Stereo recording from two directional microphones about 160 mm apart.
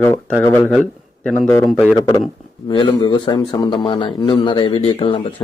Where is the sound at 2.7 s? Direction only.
25° left (ahead or behind).